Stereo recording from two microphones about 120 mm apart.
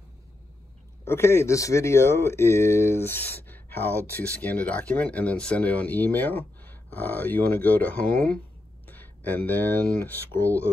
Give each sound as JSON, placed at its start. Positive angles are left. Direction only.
{"t": 1.0, "sound": "speech", "side_deg": 20}